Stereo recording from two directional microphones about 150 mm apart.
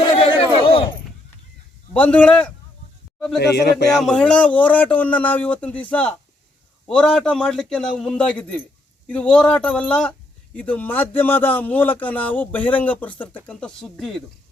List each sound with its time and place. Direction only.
0.3 s a sound: 35° left (ahead or behind)
1.9 s a man's voice: 10° left (ahead or behind)
3.4 s music: 90° left
3.9 s a man's voice: 5° left (ahead or behind)